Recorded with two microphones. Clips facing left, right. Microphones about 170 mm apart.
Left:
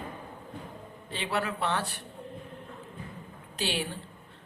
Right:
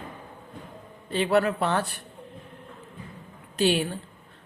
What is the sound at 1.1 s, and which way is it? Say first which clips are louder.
Speech: right 9 dB; 45° right (ahead or behind).